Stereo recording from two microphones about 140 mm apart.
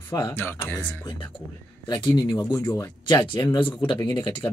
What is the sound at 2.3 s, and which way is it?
Speech, 15° left (ahead or behind).